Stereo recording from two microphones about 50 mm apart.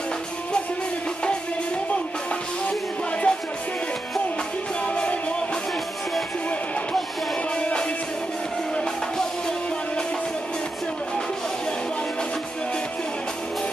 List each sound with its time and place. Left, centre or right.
3.3 s music: centre
4.8 s music: left
7.5 s music: centre